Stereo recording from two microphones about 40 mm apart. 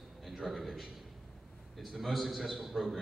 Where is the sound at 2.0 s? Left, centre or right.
Centre.